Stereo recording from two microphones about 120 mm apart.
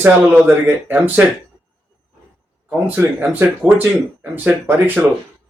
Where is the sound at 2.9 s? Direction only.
15° right (ahead or behind).